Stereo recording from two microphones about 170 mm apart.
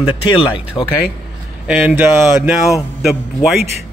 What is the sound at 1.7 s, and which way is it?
A man's voice, 10° right (ahead or behind).